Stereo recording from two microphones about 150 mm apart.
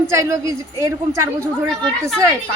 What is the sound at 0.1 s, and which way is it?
A woman's voice, 20° right (ahead or behind).